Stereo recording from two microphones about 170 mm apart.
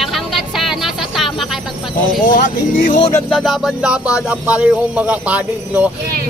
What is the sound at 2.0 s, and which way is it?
Speech, 55° left (ahead or behind).